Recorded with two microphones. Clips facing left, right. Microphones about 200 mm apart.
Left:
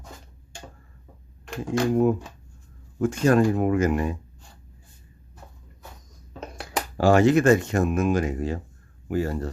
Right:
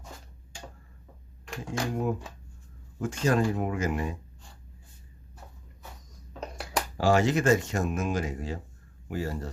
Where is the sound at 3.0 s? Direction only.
55° left (ahead or behind).